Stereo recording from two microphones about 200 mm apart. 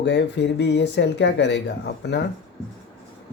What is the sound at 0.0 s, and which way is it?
Speech, 60° left (ahead or behind).